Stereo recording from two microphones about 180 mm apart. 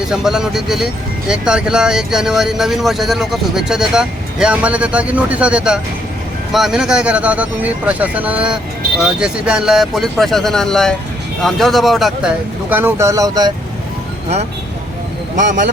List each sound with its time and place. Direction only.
0.0 s speech: 5° right (ahead or behind)
12.7 s speech: 15° right (ahead or behind)
15.4 s speech: 45° right (ahead or behind)